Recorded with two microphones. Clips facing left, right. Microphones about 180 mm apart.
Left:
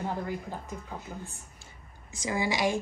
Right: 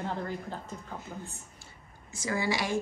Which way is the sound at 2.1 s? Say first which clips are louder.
Left 1 dB; 15° left (ahead or behind).